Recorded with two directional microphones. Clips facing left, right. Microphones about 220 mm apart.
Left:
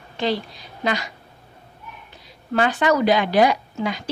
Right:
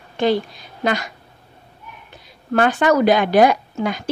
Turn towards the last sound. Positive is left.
turn(degrees=-50)  # may be behind; listen again after turning